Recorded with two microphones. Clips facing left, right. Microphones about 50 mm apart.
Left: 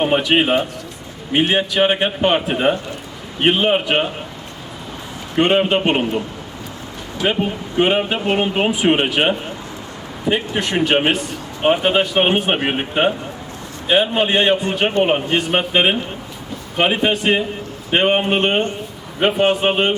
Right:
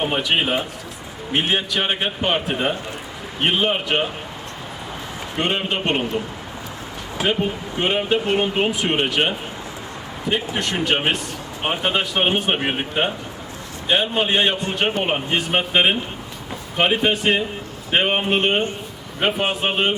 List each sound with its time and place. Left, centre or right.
0.0 s speech: centre
5.5 s speech: centre
7.3 s a man's voice: centre